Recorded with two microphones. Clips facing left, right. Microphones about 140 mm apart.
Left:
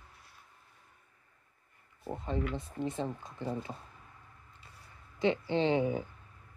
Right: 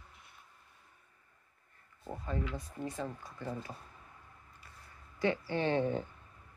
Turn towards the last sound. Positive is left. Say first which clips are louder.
# left 3 dB
turn(degrees=10)  # may be behind; listen again after turning